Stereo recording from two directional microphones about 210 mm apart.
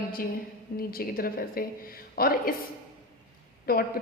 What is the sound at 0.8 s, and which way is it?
A woman's voice, 45° left (ahead or behind).